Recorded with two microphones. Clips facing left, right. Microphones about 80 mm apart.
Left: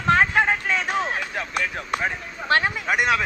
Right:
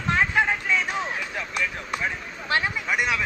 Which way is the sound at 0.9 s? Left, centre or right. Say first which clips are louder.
Left 4 dB; left.